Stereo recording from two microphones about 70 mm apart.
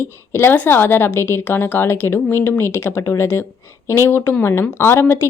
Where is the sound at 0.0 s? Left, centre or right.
Left.